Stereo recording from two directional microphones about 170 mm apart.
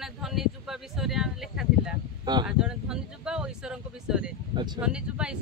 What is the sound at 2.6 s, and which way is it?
Speech, 5° right (ahead or behind).